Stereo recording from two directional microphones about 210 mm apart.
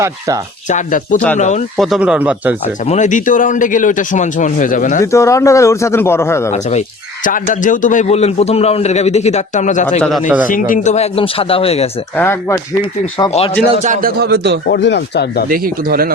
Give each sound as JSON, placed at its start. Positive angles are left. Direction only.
{"t": 0.7, "sound": "a man's voice", "side_deg": 40}
{"t": 1.8, "sound": "speech", "side_deg": 0}
{"t": 2.8, "sound": "a man's voice", "side_deg": 35}
{"t": 5.1, "sound": "speech", "side_deg": 15}
{"t": 6.5, "sound": "a man's voice", "side_deg": 35}
{"t": 12.1, "sound": "speech", "side_deg": 10}
{"t": 13.1, "sound": "a man's voice", "side_deg": 25}
{"t": 13.8, "sound": "speech", "side_deg": -40}
{"t": 14.7, "sound": "speech", "side_deg": 55}
{"t": 15.4, "sound": "speech", "side_deg": -45}